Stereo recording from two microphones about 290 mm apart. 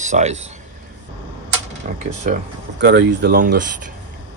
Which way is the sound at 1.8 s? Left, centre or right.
Right.